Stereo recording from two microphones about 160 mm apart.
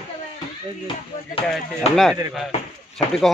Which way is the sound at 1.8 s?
40° left (ahead or behind).